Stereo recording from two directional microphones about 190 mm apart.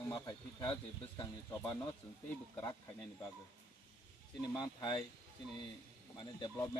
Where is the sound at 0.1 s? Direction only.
25° left (ahead or behind).